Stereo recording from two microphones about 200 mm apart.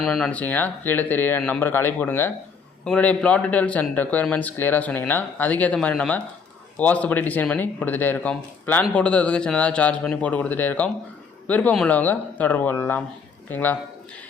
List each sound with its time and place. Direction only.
0.0 s speech: centre (ahead or behind)